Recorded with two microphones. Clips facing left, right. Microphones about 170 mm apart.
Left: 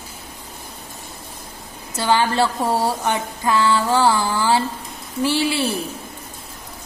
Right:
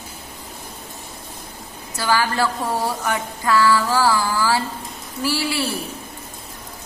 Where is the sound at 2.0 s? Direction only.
25° left (ahead or behind).